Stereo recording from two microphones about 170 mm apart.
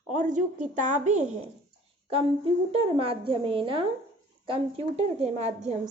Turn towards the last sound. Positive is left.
turn(degrees=-40)  # may be behind; listen again after turning